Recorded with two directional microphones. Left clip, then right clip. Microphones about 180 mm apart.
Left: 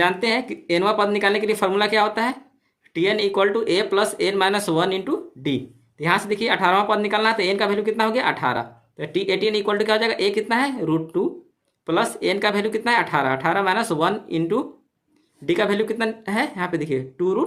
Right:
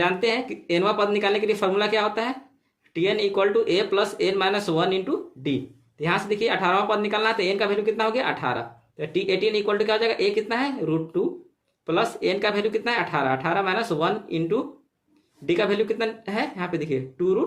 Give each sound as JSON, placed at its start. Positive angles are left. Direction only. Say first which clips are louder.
{"t": 0.0, "sound": "speech", "louder": "left 3 dB", "side_deg": 30}